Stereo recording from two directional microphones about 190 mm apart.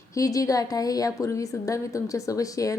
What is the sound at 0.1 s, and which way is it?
A woman's voice, 20° left (ahead or behind).